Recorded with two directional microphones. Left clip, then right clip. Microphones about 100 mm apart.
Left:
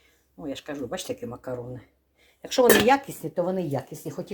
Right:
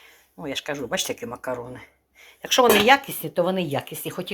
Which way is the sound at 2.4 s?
10° left (ahead or behind).